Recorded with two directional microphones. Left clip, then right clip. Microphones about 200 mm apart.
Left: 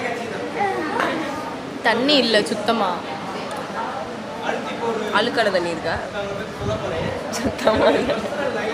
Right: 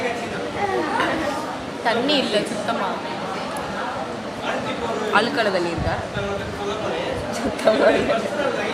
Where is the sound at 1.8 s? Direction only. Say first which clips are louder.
Left 3 dB; 45° left (ahead or behind).